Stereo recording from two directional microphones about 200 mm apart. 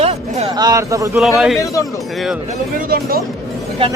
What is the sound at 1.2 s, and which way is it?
Speech, centre (ahead or behind).